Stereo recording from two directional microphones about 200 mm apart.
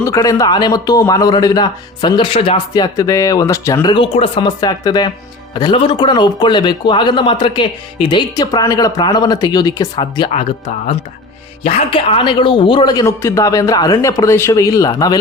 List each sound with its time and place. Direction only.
0.0 s a man's voice: 15° left (ahead or behind)
11.6 s a man's voice: 25° left (ahead or behind)